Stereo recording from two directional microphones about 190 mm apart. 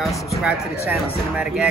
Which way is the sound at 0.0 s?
Centre (ahead or behind).